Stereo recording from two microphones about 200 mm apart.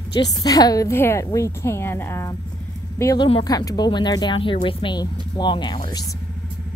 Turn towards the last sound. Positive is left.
turn(degrees=25)  # may be behind; listen again after turning